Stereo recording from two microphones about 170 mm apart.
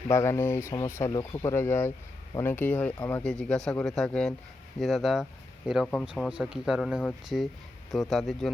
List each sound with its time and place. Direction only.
0.1 s speech: 15° left (ahead or behind)